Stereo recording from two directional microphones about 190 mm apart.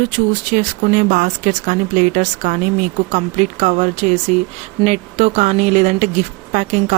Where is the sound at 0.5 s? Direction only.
45° right (ahead or behind).